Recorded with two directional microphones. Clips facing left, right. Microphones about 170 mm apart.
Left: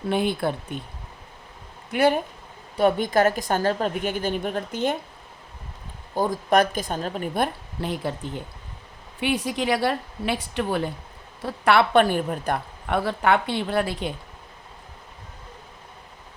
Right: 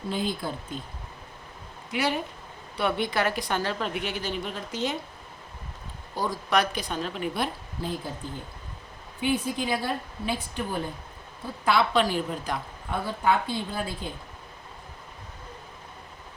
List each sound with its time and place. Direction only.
0.1 s speech: 65° left (ahead or behind)
1.9 s a woman's voice: 55° left (ahead or behind)
6.1 s a woman's voice: 50° left (ahead or behind); by 10.8 s 80° left
11.4 s a woman's voice: 70° left (ahead or behind)